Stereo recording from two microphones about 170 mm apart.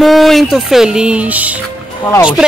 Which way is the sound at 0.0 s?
Centre (ahead or behind).